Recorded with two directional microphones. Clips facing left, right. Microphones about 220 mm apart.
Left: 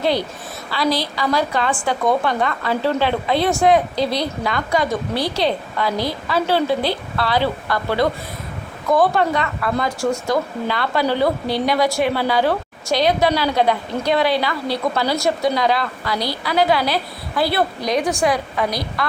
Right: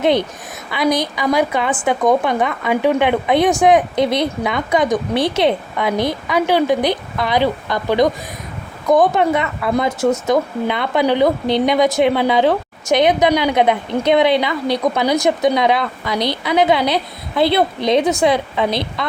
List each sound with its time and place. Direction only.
0.0 s a woman's voice: 20° right (ahead or behind)